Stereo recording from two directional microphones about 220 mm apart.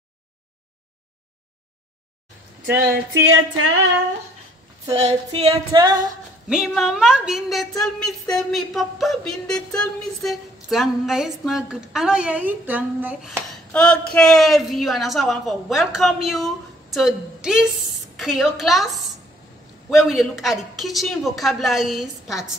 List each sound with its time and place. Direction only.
2.8 s a sound: 45° right (ahead or behind)
3.3 s music: 70° right (ahead or behind)
4.8 s a woman's voice: 30° right (ahead or behind)
5.7 s female singing: 15° right (ahead or behind)
6.5 s a woman's voice: centre (ahead or behind)
13.7 s a woman's voice: 5° left (ahead or behind)